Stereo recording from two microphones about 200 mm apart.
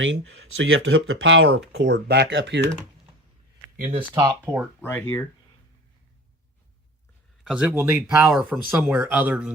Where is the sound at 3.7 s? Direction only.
40° right (ahead or behind).